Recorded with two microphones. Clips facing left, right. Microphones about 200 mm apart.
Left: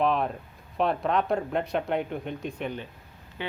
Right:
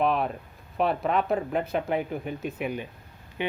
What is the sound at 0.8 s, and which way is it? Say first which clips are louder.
Speech: even; 5° right (ahead or behind).